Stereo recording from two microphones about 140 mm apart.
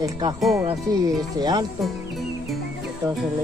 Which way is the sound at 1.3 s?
30° right (ahead or behind).